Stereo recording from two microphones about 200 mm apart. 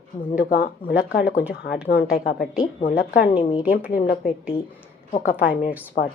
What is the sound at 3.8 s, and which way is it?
Speech, 45° left (ahead or behind).